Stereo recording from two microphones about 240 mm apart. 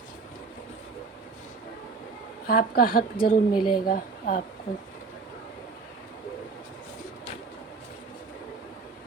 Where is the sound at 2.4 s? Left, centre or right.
Left.